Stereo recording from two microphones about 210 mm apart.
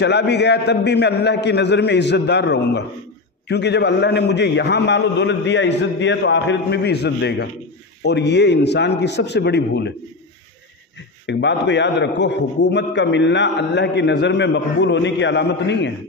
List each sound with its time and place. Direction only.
0.0 s a man's voice: 55° left (ahead or behind)
11.2 s a man's voice: 55° left (ahead or behind)